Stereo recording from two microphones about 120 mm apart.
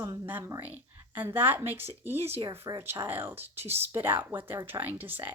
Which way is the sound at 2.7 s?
30° right (ahead or behind).